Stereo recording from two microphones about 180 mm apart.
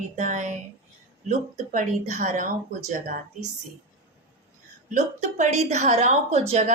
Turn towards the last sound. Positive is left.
turn(degrees=-40)  # may be behind; listen again after turning